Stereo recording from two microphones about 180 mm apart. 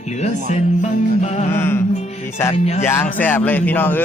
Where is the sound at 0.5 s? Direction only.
40° left (ahead or behind).